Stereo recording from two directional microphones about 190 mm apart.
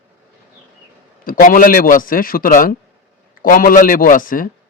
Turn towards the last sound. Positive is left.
turn(degrees=45)  # may be behind; listen again after turning